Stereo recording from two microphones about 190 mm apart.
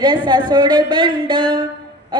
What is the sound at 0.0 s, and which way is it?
A woman's voice, 25° right (ahead or behind).